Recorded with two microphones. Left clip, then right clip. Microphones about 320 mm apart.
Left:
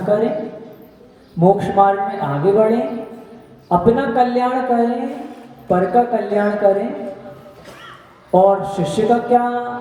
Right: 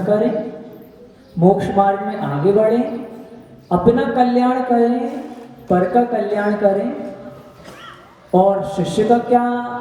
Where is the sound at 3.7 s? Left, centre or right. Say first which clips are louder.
Even; centre.